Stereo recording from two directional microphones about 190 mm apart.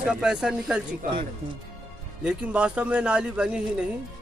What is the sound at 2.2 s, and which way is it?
Speech, 5° right (ahead or behind).